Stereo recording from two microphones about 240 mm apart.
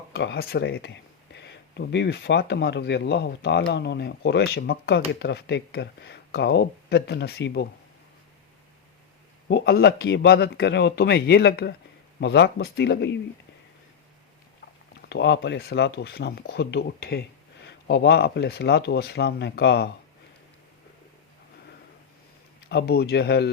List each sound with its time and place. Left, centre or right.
0.1 s speech: left
9.5 s speech: left
15.1 s speech: left
22.7 s speech: left